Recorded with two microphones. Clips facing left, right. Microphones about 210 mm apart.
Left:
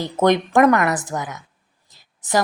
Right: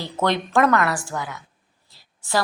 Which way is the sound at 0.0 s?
15° left (ahead or behind).